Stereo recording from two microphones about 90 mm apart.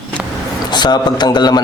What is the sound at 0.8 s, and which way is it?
Speech, 50° left (ahead or behind).